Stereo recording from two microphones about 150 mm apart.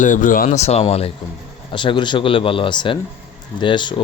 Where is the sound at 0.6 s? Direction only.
45° left (ahead or behind).